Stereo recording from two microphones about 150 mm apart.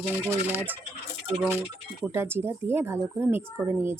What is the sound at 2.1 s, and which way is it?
A woman's voice, 15° right (ahead or behind).